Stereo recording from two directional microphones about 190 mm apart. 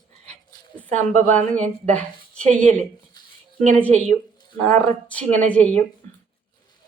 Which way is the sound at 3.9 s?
40° right (ahead or behind).